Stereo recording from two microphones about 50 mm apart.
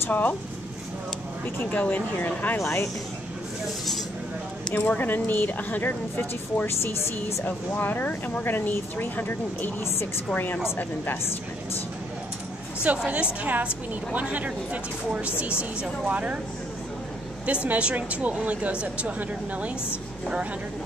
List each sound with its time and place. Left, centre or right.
0.1 s speech: left
1.7 s speech: left
2.6 s speech: left
3.6 s a sound: centre
4.7 s speech: left
13.1 s speech: right
17.5 s speech: right